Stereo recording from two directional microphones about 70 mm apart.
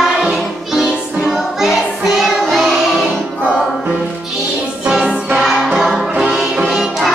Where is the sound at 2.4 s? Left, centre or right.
Centre.